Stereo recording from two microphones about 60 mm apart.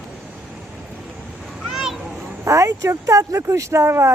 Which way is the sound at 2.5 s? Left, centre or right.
Right.